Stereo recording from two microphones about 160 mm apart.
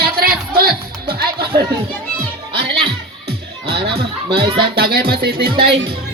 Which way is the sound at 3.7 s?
80° right.